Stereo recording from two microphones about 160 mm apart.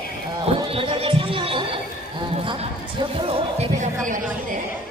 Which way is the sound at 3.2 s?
35° right (ahead or behind).